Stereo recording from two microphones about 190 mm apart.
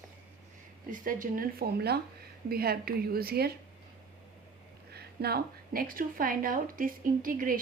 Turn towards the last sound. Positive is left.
turn(degrees=-45)  # may be behind; listen again after turning